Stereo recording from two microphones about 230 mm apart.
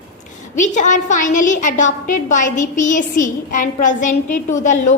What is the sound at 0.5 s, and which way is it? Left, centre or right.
A woman's voice, left.